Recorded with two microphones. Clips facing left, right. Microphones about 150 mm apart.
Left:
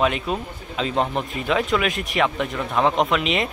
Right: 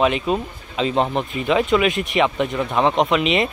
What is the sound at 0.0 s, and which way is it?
Speech, centre (ahead or behind).